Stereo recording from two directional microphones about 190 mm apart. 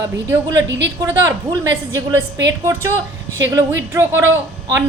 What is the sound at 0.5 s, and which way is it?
Speech, 75° right (ahead or behind).